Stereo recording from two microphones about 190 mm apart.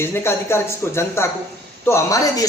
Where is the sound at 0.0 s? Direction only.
15° left (ahead or behind).